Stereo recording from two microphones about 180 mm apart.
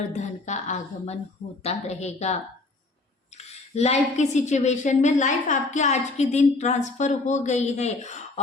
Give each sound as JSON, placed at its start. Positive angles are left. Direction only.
{"t": 0.2, "sound": "a woman's voice", "side_deg": 40}